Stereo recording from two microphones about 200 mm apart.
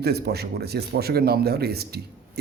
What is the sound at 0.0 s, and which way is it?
A man's voice, 55° right (ahead or behind).